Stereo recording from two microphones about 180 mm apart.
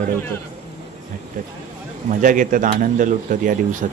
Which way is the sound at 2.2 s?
45° right (ahead or behind).